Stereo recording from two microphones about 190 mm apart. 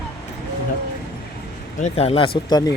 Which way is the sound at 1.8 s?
35° left (ahead or behind).